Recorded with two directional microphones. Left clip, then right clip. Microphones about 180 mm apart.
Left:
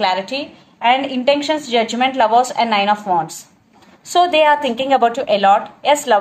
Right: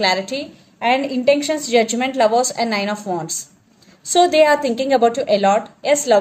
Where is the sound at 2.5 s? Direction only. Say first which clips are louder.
Left 5 dB; 60° right (ahead or behind).